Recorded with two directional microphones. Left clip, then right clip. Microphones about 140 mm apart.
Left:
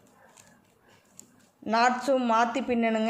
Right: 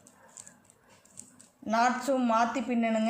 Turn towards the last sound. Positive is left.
turn(degrees=40)  # may be behind; listen again after turning